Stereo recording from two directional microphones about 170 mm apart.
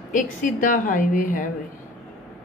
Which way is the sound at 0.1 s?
50° left (ahead or behind).